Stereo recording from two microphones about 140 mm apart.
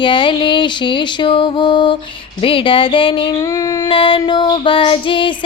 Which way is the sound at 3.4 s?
25° left (ahead or behind).